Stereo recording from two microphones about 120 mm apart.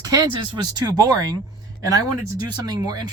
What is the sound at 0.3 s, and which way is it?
Speech, 40° right (ahead or behind).